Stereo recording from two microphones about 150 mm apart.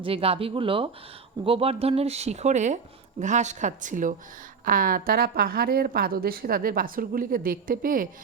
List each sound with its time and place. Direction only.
0.0 s speech: 40° right (ahead or behind); by 8.0 s 70° right (ahead or behind)